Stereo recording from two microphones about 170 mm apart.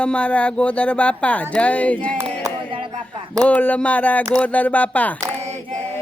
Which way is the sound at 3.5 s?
10° left (ahead or behind).